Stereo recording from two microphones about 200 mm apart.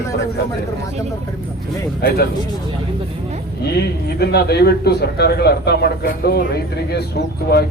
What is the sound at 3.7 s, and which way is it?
A man's voice, 55° left (ahead or behind).